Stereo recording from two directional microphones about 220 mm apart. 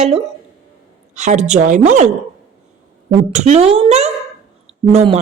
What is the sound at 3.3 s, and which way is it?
Speech, 30° right (ahead or behind).